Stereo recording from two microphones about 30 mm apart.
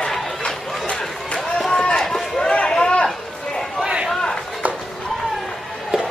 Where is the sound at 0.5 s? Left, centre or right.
Centre.